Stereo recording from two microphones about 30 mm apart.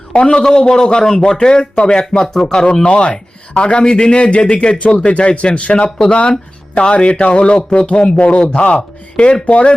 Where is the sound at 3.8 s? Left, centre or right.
Left.